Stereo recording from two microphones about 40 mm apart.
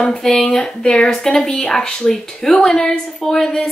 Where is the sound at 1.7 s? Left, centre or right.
Centre.